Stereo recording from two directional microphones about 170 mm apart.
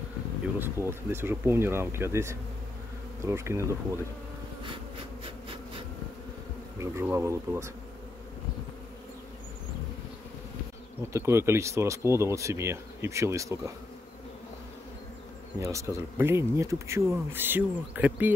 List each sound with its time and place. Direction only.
0.6 s speech: 15° right (ahead or behind)
6.8 s speech: 15° right (ahead or behind)
11.1 s speech: 15° right (ahead or behind)
15.6 s speech: 15° right (ahead or behind)